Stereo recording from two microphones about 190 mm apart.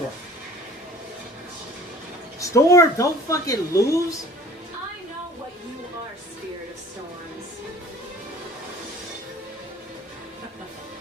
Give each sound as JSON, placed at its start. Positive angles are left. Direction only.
{"t": 2.4, "sound": "speech", "side_deg": 15}